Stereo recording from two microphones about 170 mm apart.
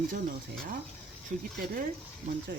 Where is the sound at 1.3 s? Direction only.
45° right (ahead or behind).